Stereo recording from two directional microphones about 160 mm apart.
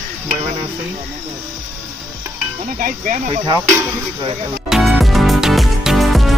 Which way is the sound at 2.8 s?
50° right (ahead or behind).